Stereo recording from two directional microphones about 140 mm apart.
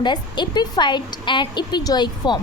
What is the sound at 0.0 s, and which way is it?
A woman's voice, 30° left (ahead or behind).